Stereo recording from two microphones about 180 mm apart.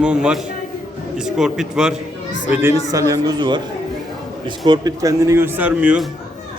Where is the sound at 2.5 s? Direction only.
15° right (ahead or behind).